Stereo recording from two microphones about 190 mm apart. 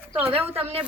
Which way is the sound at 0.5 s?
30° right (ahead or behind).